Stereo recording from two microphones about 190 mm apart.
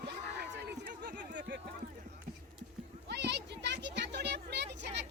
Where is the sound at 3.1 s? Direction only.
65° right (ahead or behind).